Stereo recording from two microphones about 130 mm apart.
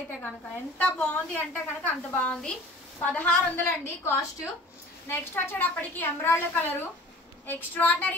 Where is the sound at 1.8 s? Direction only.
10° left (ahead or behind).